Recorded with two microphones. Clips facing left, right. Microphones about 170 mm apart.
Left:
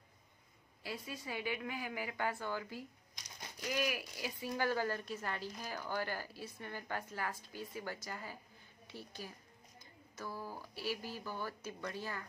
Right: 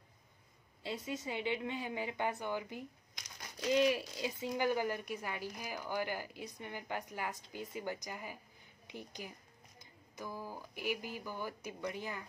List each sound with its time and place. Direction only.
0.8 s a woman's voice: 20° right (ahead or behind)